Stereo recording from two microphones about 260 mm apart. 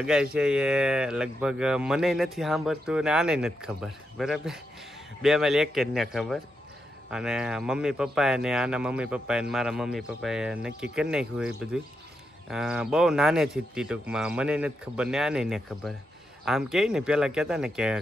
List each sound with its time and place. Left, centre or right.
0.0 s speech: centre